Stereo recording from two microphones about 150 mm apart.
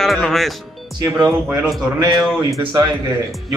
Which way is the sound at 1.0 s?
25° right (ahead or behind).